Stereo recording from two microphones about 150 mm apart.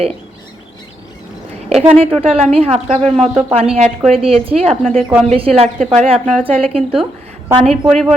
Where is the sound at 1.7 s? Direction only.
40° right (ahead or behind).